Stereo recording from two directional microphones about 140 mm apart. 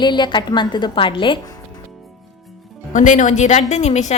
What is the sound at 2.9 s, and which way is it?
A woman's voice, 60° left (ahead or behind).